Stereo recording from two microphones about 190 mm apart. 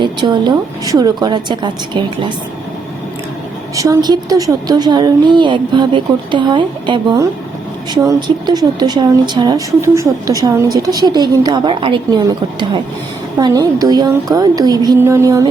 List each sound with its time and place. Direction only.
0.0 s speech: 25° right (ahead or behind)
3.8 s speech: 20° right (ahead or behind)